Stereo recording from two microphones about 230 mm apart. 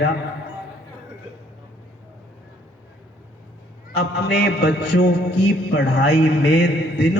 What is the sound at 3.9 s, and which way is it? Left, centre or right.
A man's voice, left.